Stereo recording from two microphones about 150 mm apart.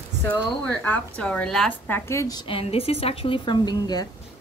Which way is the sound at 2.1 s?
20° left (ahead or behind).